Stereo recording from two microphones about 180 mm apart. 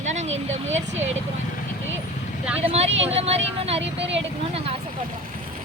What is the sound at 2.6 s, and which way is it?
A woman's voice, 35° right (ahead or behind).